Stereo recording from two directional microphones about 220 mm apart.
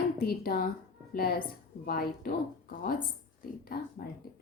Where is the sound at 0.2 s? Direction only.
40° left (ahead or behind).